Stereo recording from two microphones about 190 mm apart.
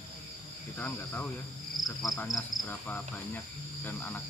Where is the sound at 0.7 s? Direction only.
10° left (ahead or behind).